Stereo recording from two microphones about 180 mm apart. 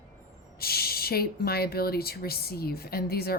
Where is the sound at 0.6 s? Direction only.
60° left (ahead or behind).